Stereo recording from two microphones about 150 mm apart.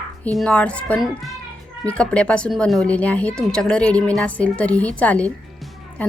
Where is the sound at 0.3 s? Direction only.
5° left (ahead or behind).